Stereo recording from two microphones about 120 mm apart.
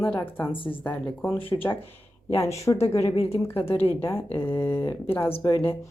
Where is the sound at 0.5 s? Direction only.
45° left (ahead or behind).